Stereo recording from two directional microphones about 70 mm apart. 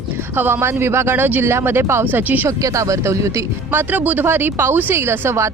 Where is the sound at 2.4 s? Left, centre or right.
Right.